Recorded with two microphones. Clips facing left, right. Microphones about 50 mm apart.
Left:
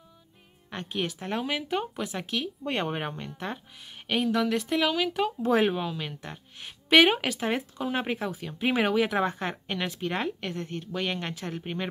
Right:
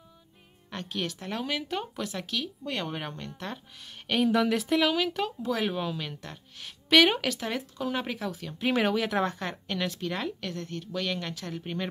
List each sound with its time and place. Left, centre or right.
0.7 s speech: centre
4.1 s speech: centre
5.4 s speech: left
5.7 s speech: centre